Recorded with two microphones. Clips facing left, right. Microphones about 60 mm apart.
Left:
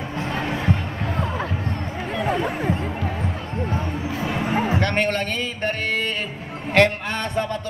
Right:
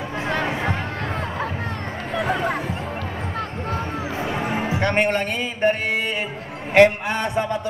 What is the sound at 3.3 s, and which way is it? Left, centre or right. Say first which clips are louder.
Basketball bounce: even; right.